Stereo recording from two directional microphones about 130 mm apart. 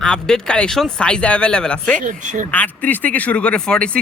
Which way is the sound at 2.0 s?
80° right.